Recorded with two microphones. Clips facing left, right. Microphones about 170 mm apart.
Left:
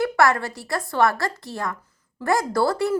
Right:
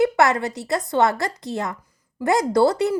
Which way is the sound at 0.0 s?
20° right (ahead or behind).